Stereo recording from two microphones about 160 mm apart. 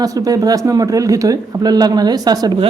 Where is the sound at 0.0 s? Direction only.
20° right (ahead or behind).